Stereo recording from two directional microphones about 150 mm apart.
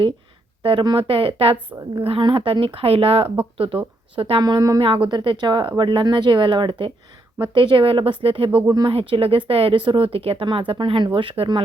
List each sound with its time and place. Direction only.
0.6 s speech: 35° right (ahead or behind)
4.8 s speech: 35° right (ahead or behind)
8.6 s speech: 25° right (ahead or behind)
8.9 s speech: 40° right (ahead or behind)